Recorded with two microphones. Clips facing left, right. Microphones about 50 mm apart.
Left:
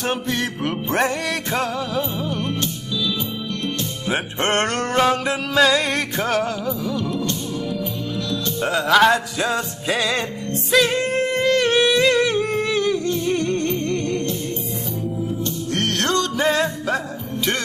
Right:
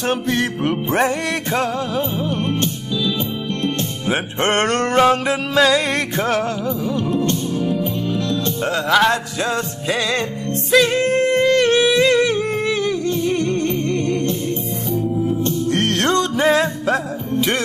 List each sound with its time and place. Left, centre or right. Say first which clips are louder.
0.0 s music: right 4 dB; centre
2.0 s music: right 3 dB; right
4.1 s music: right 2 dB; centre
5.0 s music: right 3 dB; centre
5.3 s music: right 2 dB; centre
7.0 s music: right 5 dB; right
8.6 s music: left 1 dB; centre
10.7 s singing: right 3 dB; centre
13.2 s music: right 2 dB; centre
15.7 s music: right 2 dB; centre